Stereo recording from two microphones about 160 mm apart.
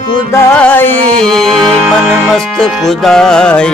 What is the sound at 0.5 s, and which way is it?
Music, 10° left (ahead or behind).